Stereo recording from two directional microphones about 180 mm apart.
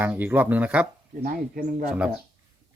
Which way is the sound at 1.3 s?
50° right (ahead or behind).